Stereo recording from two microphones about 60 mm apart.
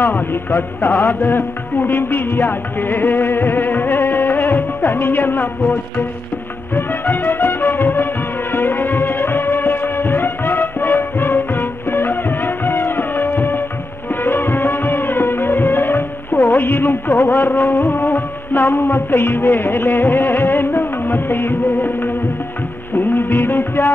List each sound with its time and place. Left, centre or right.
0.0 s music: left
6.7 s music: left